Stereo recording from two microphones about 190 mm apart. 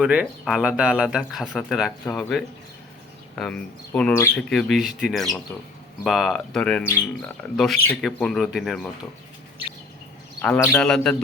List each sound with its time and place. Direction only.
0.0 s speech: 5° right (ahead or behind)
10.4 s speech: 5° left (ahead or behind)